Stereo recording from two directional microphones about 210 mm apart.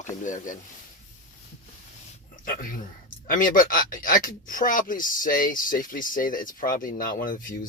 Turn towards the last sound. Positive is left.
turn(degrees=40)  # may be behind; listen again after turning